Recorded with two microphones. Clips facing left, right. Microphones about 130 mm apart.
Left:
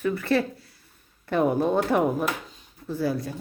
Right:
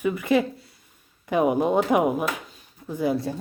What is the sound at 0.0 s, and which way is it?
Speech, 15° right (ahead or behind).